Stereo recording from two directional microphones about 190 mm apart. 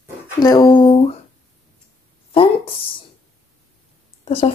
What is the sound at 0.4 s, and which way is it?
Speech, 20° left (ahead or behind).